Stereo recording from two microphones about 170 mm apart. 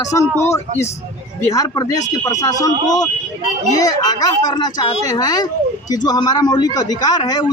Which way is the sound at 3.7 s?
25° left (ahead or behind).